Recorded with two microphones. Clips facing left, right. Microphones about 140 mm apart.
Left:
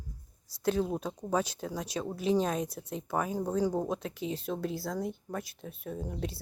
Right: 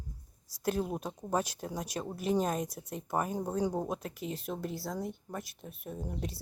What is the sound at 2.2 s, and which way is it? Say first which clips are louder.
Speech: left 2 dB; 45° right (ahead or behind).